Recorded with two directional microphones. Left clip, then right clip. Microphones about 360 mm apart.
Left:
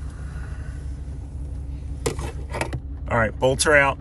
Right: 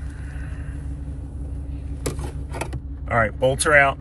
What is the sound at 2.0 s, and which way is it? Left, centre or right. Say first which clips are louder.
Vehicle: left 3 dB; centre.